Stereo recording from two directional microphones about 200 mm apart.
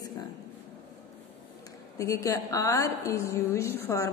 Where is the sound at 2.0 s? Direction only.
15° left (ahead or behind).